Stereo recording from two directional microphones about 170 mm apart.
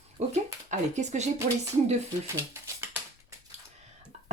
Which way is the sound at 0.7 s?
45° right (ahead or behind).